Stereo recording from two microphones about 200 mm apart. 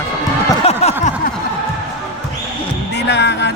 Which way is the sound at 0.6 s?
30° left (ahead or behind).